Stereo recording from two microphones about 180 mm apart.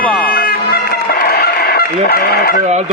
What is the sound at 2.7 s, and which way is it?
Speech, 40° right (ahead or behind).